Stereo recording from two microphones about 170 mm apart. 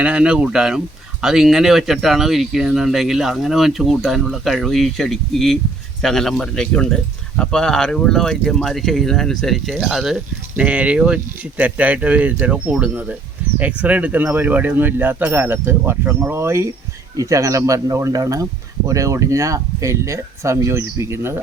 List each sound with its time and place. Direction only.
0.0 s speech: 5° right (ahead or behind)